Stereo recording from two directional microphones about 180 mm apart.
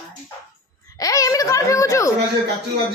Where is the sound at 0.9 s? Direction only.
20° left (ahead or behind).